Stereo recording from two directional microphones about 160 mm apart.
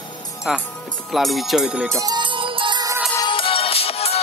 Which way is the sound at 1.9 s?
20° right (ahead or behind).